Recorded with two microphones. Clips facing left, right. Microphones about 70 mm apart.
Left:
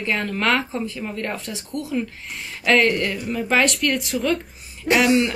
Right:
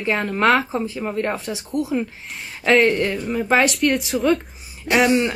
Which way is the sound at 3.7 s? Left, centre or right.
Centre.